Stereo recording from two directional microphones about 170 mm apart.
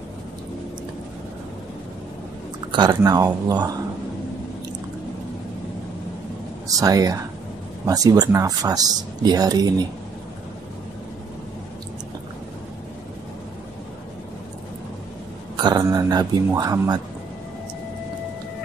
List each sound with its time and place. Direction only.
2.7 s speech: 25° right (ahead or behind)
6.8 s speech: 20° right (ahead or behind)
15.6 s speech: 20° right (ahead or behind)